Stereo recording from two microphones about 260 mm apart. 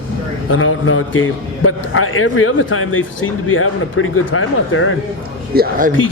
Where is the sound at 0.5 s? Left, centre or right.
Left.